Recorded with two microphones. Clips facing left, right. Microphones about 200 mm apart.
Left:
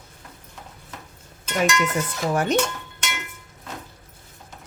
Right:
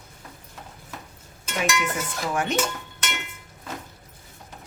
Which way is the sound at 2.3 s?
40° left (ahead or behind).